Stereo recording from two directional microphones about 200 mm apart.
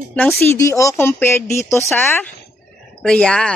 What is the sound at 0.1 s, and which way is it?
Speech, 5° left (ahead or behind).